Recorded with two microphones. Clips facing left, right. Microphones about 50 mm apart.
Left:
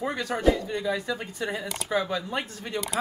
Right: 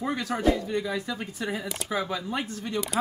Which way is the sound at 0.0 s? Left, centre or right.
Centre.